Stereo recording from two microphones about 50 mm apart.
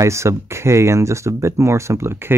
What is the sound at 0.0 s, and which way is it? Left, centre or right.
Speech, right.